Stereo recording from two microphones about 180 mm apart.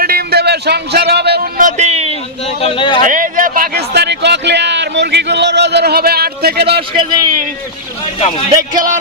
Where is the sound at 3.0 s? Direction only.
45° right (ahead or behind); by 6.8 s 65° right (ahead or behind).